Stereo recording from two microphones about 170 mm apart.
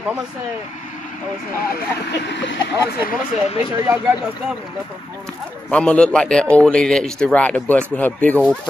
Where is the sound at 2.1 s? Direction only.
90° left.